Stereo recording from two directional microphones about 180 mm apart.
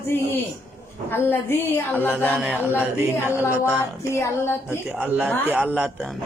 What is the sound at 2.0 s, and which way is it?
Chant, 5° right (ahead or behind).